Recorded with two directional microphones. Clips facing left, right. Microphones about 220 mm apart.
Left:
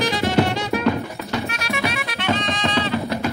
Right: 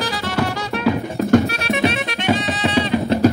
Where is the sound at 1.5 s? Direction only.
25° right (ahead or behind).